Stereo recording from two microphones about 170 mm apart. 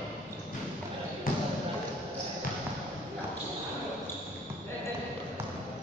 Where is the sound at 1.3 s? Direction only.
55° left (ahead or behind).